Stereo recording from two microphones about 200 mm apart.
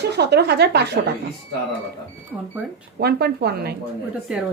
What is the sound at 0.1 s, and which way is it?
Speech, 55° right (ahead or behind).